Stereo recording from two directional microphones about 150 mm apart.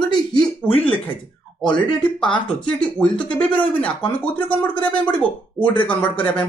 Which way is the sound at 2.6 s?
5° left (ahead or behind).